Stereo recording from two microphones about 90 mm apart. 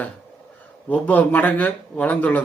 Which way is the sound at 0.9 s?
15° left (ahead or behind).